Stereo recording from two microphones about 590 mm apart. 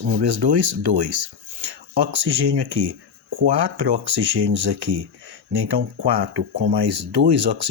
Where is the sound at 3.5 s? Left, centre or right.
Right.